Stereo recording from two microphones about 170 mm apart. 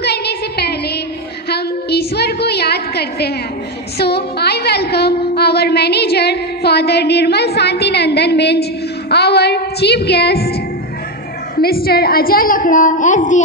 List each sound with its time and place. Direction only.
0.0 s music: 75° left (ahead or behind)
1.5 s a sound: 70° left (ahead or behind)
4.0 s a woman's voice: 75° left (ahead or behind); by 13.4 s 50° left (ahead or behind)